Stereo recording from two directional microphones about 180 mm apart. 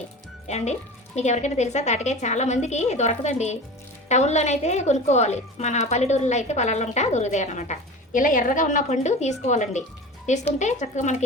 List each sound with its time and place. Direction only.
0.4 s a woman's voice: 40° left (ahead or behind)